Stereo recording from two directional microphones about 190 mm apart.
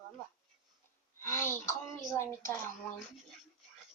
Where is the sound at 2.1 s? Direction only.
15° left (ahead or behind).